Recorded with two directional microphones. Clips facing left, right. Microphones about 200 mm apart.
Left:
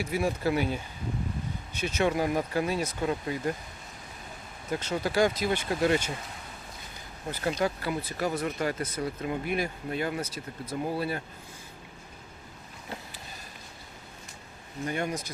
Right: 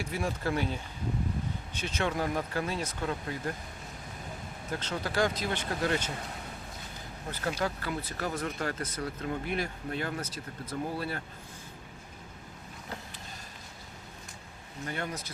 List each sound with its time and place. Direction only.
0.0 s speech: 10° left (ahead or behind)
4.7 s speech: 10° left (ahead or behind)
7.6 s speech: 10° left (ahead or behind)
14.8 s speech: 15° left (ahead or behind)